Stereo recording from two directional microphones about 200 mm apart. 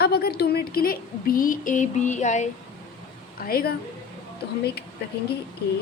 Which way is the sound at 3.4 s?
50° left (ahead or behind).